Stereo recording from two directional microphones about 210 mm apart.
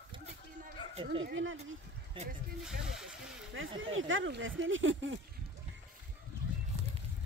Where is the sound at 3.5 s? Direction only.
70° right (ahead or behind).